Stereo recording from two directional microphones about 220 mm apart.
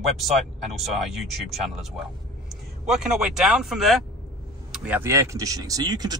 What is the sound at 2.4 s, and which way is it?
Speech, centre (ahead or behind).